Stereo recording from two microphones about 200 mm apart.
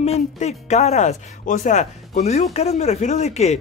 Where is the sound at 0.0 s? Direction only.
35° left (ahead or behind).